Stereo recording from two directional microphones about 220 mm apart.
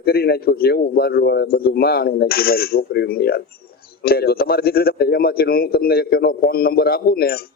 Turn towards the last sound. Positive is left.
turn(degrees=45)  # may be behind; listen again after turning